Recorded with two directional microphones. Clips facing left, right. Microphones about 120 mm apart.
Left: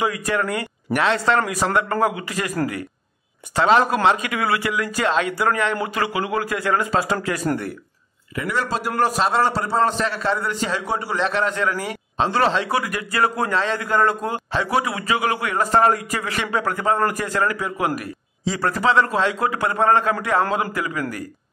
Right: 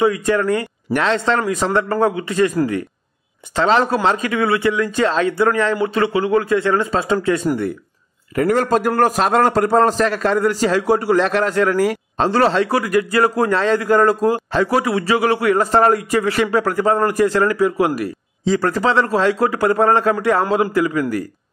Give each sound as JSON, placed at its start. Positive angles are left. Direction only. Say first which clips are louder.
{"t": 0.0, "sound": "speech", "louder": "right 6 dB", "side_deg": -30}
{"t": 3.8, "sound": "a man's voice", "louder": "right 1 dB", "side_deg": -30}
{"t": 8.4, "sound": "a man's voice", "louder": "right 8 dB", "side_deg": -50}